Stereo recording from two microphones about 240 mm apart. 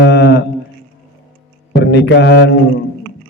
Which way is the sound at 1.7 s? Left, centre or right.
Left.